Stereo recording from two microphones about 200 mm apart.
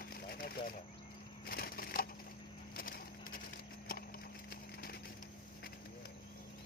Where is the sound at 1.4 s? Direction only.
50° left (ahead or behind).